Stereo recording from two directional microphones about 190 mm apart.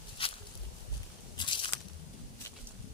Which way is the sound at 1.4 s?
25° left (ahead or behind).